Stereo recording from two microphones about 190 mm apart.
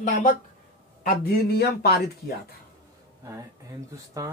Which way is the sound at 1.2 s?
55° left (ahead or behind).